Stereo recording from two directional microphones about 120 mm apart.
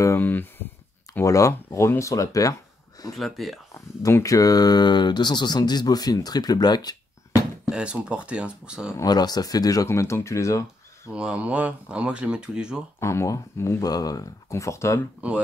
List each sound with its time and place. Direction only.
0.0 s speech: 20° left (ahead or behind)
3.2 s speech: centre (ahead or behind)
3.7 s speech: 25° left (ahead or behind)
7.7 s speech: 10° right (ahead or behind)
8.9 s speech: 35° left (ahead or behind)
11.1 s speech: 10° right (ahead or behind)
13.0 s speech: 25° left (ahead or behind)
15.2 s speech: 10° right (ahead or behind)